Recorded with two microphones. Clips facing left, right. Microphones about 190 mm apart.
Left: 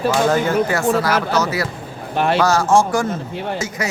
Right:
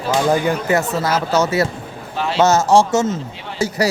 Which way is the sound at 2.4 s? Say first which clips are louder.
Right 5 dB; 20° right (ahead or behind).